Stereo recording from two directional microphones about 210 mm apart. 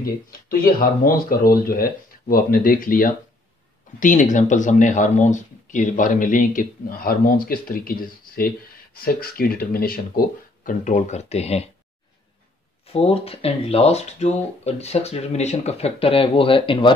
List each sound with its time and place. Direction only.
0.0 s speech: 45° left (ahead or behind)
12.8 s speech: 30° left (ahead or behind)